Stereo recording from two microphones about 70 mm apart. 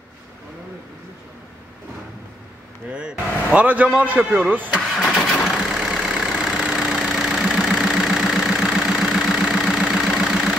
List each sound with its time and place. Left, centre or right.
2.9 s a man's voice: centre
5.0 s vehicle: centre